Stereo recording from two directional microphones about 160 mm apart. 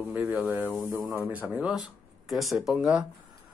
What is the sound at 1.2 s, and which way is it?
Speech, 10° right (ahead or behind).